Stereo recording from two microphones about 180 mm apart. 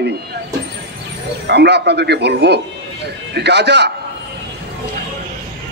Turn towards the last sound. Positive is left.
turn(degrees=-70)  # may be behind; listen again after turning